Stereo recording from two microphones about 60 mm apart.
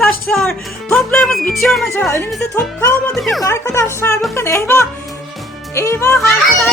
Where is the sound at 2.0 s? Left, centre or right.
Left.